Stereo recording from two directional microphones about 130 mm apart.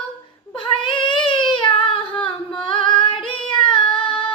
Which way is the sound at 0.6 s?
40° left (ahead or behind).